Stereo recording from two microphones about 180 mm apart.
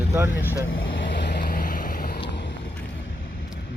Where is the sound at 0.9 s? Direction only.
85° left; by 2.2 s 55° left (ahead or behind).